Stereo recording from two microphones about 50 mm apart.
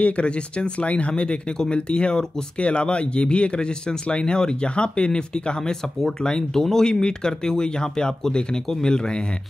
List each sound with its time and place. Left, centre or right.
0.0 s speech: left
5.7 s speech: centre